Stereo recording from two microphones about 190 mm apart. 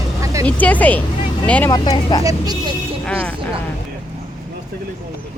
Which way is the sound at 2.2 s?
20° right (ahead or behind).